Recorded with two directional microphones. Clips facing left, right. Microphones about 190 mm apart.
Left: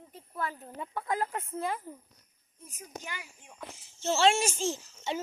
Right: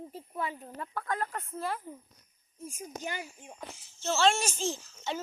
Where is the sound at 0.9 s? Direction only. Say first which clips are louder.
Left 2 dB; 25° left (ahead or behind).